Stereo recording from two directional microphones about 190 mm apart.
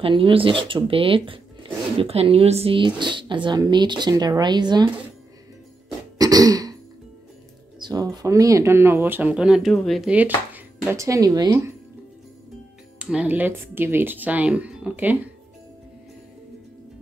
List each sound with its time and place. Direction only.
0.0 s speech: 30° right (ahead or behind)
6.1 s throat clearing: 20° right (ahead or behind)
7.8 s speech: 20° right (ahead or behind)
13.0 s speech: 5° right (ahead or behind)